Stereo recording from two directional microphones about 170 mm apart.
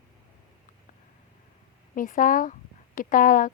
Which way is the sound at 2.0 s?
50° left (ahead or behind).